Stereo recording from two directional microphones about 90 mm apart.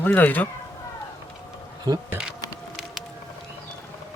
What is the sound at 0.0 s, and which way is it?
Speech, 20° left (ahead or behind).